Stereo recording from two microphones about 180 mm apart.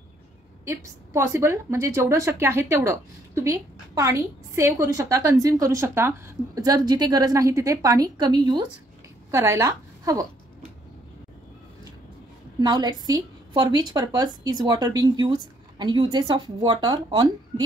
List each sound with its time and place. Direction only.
0.7 s a woman's voice: 15° right (ahead or behind)
12.5 s a woman's voice: 25° right (ahead or behind)